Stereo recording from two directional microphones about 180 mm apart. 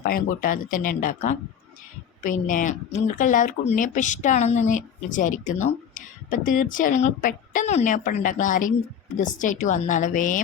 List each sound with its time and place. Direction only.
0.0 s speech: 50° left (ahead or behind)